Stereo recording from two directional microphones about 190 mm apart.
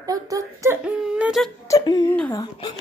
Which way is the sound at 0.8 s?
5° right (ahead or behind).